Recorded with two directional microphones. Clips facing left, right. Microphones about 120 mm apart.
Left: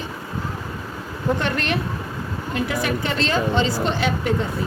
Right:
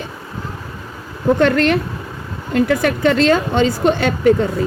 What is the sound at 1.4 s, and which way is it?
A woman's voice, 60° right (ahead or behind).